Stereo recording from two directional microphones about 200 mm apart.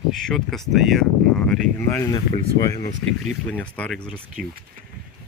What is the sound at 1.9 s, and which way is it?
Speech, 20° left (ahead or behind).